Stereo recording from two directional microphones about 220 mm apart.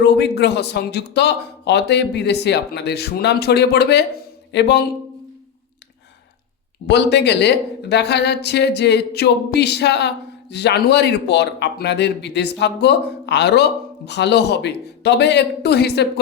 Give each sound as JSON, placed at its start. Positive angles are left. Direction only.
{"t": 0.0, "sound": "a man's voice", "side_deg": 50}
{"t": 6.8, "sound": "a man's voice", "side_deg": 50}